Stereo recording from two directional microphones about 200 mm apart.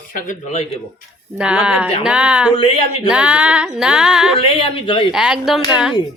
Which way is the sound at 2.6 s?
30° left (ahead or behind).